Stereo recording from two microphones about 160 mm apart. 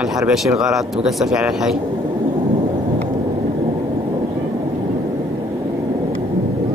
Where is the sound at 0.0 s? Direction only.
Centre (ahead or behind).